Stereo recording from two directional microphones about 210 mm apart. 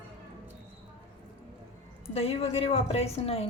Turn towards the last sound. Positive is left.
turn(degrees=30)  # may be behind; listen again after turning